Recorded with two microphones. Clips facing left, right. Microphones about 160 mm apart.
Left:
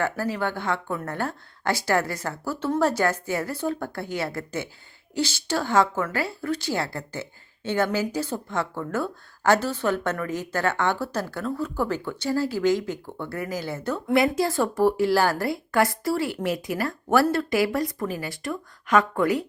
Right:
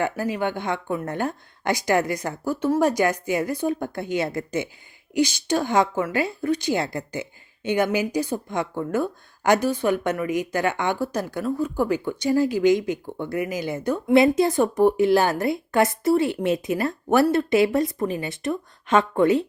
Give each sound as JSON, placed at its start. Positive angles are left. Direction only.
{"t": 0.0, "sound": "speech", "side_deg": -15}